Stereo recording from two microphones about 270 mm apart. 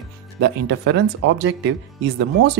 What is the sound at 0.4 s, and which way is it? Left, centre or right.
Speech, right.